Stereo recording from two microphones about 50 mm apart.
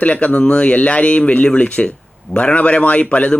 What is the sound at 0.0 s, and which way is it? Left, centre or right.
Speech, left.